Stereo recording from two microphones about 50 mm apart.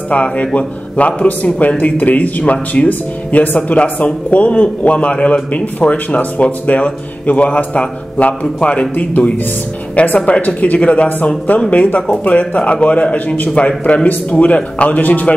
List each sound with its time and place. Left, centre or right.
0.1 s speech: left